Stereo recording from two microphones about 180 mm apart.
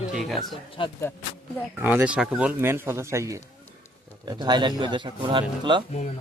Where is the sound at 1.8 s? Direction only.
10° right (ahead or behind); by 5.8 s 25° right (ahead or behind).